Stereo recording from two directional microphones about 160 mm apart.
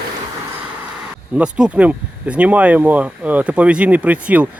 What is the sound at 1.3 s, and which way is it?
Speech, 10° right (ahead or behind).